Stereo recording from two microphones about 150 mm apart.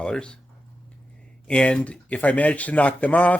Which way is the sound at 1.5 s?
5° left (ahead or behind).